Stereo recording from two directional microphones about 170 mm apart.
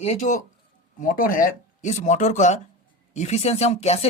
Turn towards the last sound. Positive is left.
turn(degrees=40)  # may be behind; listen again after turning